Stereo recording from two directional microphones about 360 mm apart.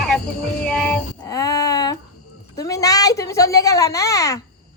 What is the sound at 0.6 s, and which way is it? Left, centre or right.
Music, centre.